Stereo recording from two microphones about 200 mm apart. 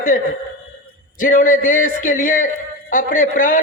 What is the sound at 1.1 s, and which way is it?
A man's voice, 40° left (ahead or behind).